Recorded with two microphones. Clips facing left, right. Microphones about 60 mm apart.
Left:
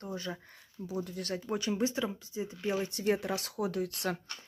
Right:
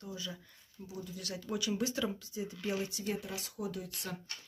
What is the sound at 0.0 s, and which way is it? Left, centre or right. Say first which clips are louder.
Speech: left 5 dB; left.